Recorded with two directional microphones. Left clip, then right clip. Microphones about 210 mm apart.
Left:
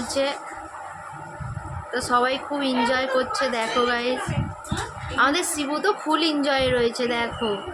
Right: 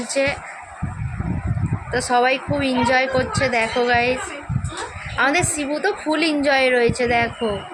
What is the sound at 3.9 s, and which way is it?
Speech, 40° left (ahead or behind).